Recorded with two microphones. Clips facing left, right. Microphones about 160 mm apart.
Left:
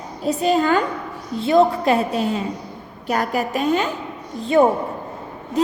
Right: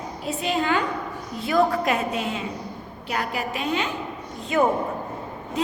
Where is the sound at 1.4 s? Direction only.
25° left (ahead or behind); by 3.9 s 45° left (ahead or behind).